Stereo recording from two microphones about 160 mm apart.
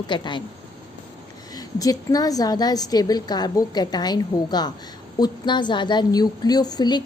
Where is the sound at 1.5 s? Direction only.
25° left (ahead or behind).